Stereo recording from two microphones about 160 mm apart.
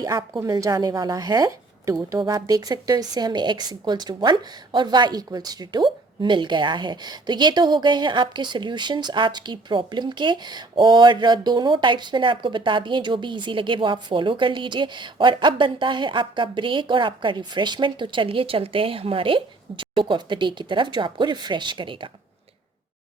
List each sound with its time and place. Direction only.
0.0 s speech: 20° right (ahead or behind)